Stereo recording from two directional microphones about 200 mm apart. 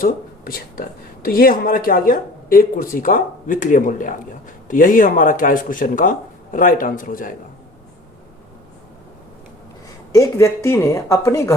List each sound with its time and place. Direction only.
0.0 s speech: 45° left (ahead or behind)
10.1 s speech: 15° left (ahead or behind)